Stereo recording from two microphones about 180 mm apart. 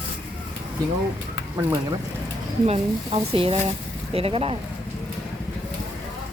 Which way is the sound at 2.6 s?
35° right (ahead or behind).